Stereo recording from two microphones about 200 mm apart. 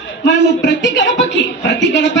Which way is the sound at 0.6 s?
60° left (ahead or behind).